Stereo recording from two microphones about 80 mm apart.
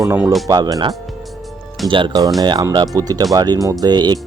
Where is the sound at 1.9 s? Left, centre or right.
Right.